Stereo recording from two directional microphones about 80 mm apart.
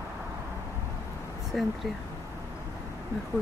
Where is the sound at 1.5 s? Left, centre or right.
Centre.